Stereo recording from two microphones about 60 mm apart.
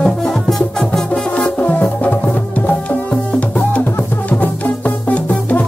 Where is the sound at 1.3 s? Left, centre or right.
Left.